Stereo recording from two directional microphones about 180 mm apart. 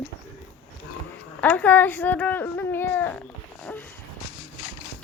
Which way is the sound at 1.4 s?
10° left (ahead or behind).